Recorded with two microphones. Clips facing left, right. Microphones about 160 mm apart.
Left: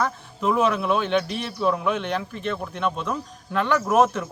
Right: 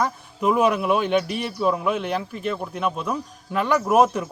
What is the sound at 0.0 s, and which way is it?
Speech, 10° right (ahead or behind).